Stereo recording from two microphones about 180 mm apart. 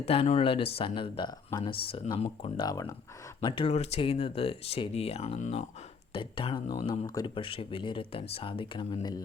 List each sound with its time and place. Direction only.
0.0 s speech: 35° left (ahead or behind)